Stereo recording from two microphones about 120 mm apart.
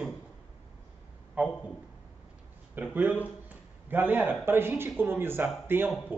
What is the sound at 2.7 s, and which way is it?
Speech, 15° right (ahead or behind).